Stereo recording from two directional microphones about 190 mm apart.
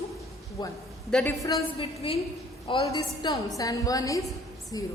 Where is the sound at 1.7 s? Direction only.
30° left (ahead or behind).